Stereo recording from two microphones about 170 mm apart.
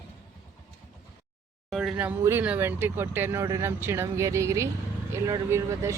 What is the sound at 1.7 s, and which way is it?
Speech, 5° right (ahead or behind).